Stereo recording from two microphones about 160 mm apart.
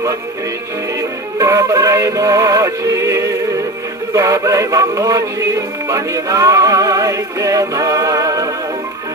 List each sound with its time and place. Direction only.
1.4 s music: 20° right (ahead or behind)